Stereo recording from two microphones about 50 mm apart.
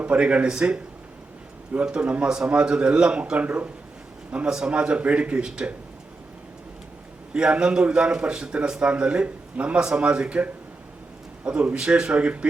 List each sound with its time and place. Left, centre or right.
0.0 s a man's voice: right
7.3 s a man's voice: centre